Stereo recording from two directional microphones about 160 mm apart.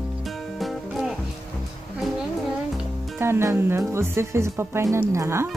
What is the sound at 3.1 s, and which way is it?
Speech, 15° right (ahead or behind).